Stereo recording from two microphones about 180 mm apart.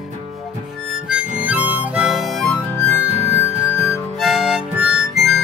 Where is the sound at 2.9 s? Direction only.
20° left (ahead or behind).